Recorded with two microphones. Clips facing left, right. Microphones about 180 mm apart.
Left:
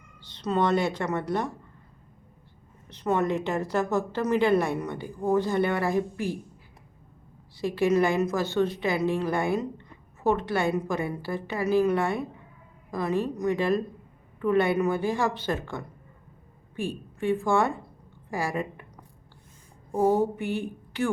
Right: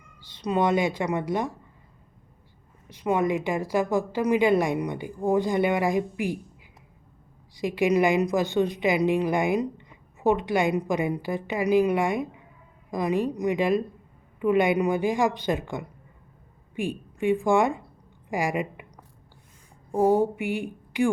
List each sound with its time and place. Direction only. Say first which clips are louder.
0.2 s a woman's voice: right 1 dB; 10° right (ahead or behind)
2.9 s a woman's voice: right 1 dB; 10° right (ahead or behind)
7.5 s a woman's voice: right 1 dB; 15° right (ahead or behind)
19.9 s a woman's voice: right 2 dB; 15° right (ahead or behind)